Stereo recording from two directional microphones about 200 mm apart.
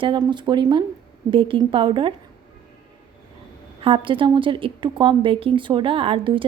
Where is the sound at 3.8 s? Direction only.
25° right (ahead or behind).